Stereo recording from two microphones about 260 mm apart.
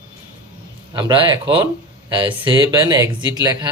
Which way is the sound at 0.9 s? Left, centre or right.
Centre.